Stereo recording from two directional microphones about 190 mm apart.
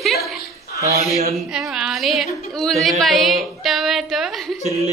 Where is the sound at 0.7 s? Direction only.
50° left (ahead or behind).